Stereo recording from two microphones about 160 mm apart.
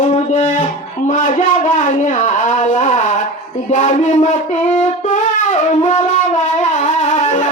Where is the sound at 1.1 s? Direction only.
50° left (ahead or behind).